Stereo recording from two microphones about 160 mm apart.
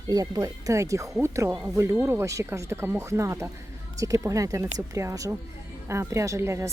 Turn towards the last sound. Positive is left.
turn(degrees=-15)  # may be behind; listen again after turning